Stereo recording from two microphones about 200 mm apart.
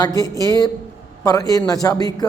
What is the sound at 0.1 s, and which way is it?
Speech, 20° right (ahead or behind).